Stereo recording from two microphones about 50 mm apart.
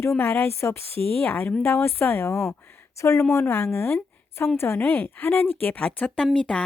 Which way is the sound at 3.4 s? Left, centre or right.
Left.